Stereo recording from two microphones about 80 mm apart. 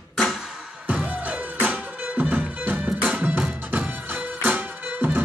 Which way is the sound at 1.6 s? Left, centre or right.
Centre.